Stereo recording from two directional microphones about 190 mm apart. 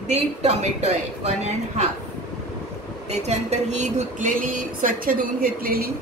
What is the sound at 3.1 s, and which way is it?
A woman's voice, 35° right (ahead or behind).